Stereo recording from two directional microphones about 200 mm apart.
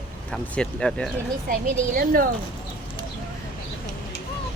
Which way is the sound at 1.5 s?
45° right (ahead or behind).